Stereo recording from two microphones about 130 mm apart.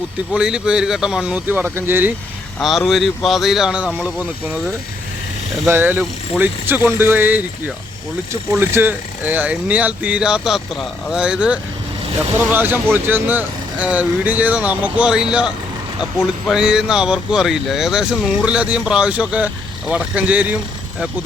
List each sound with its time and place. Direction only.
0.3 s speech: 5° right (ahead or behind)
2.6 s speech: centre (ahead or behind)